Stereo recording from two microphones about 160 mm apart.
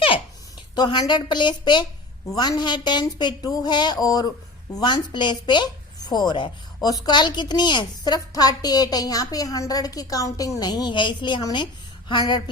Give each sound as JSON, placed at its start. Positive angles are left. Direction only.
{"t": 0.8, "sound": "a woman's voice", "side_deg": 30}